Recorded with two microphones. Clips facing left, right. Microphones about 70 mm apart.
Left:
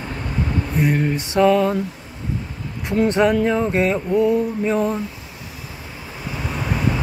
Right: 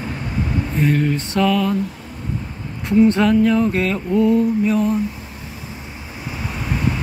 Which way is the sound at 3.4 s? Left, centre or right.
Left.